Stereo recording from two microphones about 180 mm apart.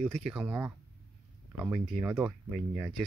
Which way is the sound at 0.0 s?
Centre (ahead or behind).